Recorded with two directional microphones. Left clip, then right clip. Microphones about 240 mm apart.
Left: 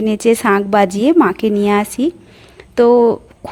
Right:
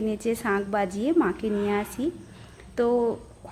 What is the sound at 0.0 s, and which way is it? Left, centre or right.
A woman's voice, left.